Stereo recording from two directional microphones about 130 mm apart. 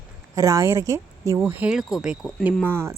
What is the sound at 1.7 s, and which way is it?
Speech, centre (ahead or behind).